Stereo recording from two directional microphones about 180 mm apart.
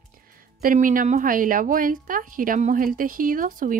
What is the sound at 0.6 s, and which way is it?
A woman's voice, 50° right (ahead or behind).